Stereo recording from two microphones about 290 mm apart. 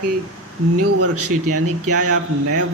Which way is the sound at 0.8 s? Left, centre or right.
Right.